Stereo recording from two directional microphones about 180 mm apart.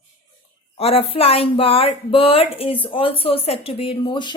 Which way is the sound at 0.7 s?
35° left (ahead or behind).